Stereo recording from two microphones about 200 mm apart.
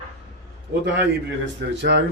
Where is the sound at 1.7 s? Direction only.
60° right (ahead or behind).